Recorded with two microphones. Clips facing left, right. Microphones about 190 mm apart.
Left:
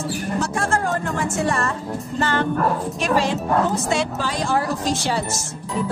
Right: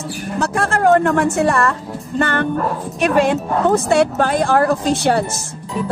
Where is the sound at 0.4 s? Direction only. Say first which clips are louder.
Right 7 dB; 65° right (ahead or behind).